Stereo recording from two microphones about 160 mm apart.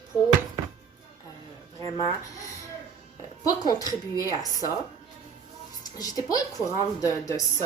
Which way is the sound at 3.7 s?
25° left (ahead or behind).